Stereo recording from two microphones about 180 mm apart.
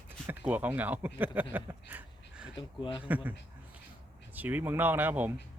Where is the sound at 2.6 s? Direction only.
25° left (ahead or behind).